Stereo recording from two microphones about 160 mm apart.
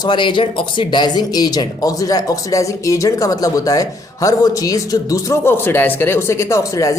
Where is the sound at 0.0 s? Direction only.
30° left (ahead or behind).